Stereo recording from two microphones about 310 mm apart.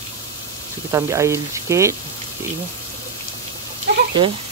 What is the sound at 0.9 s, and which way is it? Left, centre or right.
Speech, centre.